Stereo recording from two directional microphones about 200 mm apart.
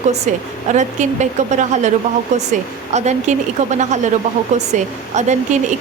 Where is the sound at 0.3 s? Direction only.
35° right (ahead or behind).